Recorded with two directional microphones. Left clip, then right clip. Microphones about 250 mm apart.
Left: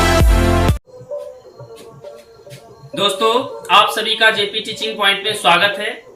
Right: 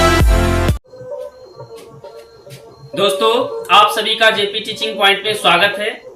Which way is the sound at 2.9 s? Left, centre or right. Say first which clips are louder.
Right 2 dB; centre.